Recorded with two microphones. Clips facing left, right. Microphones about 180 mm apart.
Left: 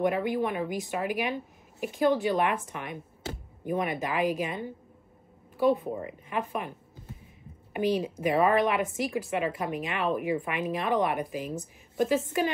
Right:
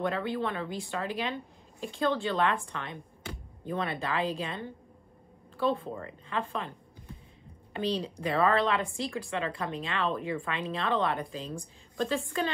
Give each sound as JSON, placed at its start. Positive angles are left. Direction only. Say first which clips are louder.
{"t": 0.0, "sound": "speech", "louder": "left 4 dB", "side_deg": 15}
{"t": 7.7, "sound": "speech", "louder": "left 4 dB", "side_deg": 15}